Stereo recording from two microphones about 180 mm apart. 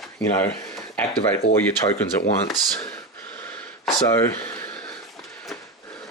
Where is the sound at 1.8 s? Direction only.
15° left (ahead or behind).